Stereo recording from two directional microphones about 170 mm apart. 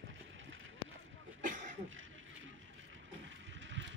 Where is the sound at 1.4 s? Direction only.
50° right (ahead or behind).